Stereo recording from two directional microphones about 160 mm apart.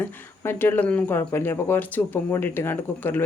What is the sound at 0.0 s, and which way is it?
Speech, 10° left (ahead or behind).